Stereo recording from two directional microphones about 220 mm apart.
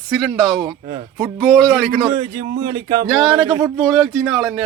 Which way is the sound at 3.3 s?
20° right (ahead or behind).